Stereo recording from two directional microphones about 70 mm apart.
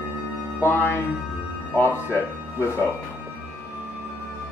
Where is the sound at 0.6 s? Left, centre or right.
Left.